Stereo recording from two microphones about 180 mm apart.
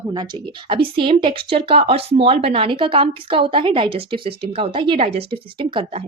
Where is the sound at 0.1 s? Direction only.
25° right (ahead or behind).